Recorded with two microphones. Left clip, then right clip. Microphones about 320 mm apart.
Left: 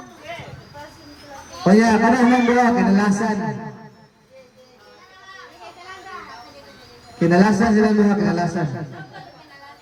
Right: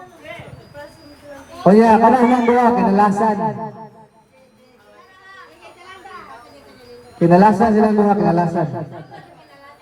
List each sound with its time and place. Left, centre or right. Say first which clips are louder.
1.6 s a man's voice: right 5 dB; centre
7.2 s a man's voice: right 5 dB; centre